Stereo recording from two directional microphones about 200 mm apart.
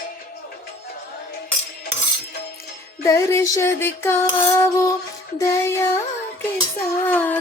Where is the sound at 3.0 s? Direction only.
15° left (ahead or behind).